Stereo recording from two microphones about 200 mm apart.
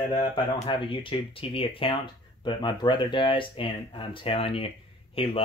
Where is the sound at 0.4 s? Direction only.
25° left (ahead or behind).